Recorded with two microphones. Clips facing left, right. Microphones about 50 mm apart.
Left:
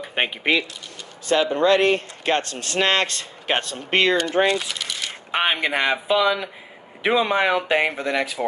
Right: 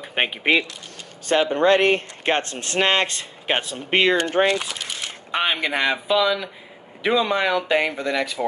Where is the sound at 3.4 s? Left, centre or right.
Centre.